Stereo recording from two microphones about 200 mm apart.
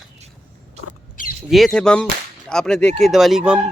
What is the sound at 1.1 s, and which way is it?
Rodents, 45° left (ahead or behind).